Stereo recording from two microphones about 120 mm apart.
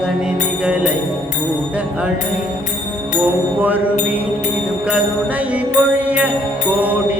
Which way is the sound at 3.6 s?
15° right (ahead or behind).